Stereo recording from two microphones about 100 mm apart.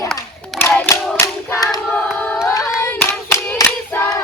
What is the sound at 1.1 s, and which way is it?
Hands, 30° left (ahead or behind).